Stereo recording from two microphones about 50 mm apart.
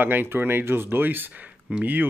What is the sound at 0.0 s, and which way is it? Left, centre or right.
Speech, right.